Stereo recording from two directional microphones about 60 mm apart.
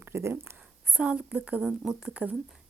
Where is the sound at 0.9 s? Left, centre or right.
Right.